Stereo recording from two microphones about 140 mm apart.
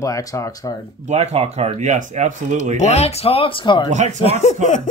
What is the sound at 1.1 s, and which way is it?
Speech, 50° right (ahead or behind).